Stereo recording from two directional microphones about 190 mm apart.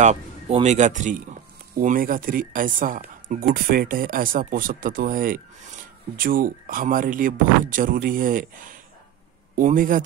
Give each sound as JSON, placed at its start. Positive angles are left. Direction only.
{"t": 0.0, "sound": "speech", "side_deg": -40}
{"t": 9.6, "sound": "speech", "side_deg": -45}